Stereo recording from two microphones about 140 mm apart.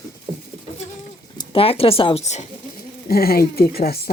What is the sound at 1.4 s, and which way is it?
Speech, 40° left (ahead or behind).